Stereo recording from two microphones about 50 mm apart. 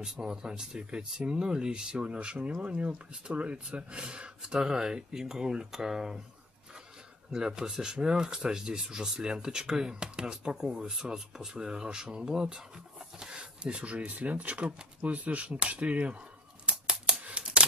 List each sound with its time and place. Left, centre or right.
0.0 s speech: centre
7.3 s speech: centre
16.6 s scissors: centre
17.2 s a sound: right